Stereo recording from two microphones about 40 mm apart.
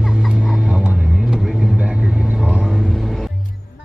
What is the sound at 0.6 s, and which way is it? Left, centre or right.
Vehicle, right.